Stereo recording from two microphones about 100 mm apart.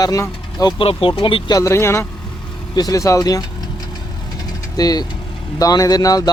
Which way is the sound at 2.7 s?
40° left (ahead or behind).